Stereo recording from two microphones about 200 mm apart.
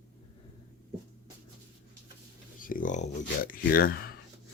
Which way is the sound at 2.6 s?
45° left (ahead or behind).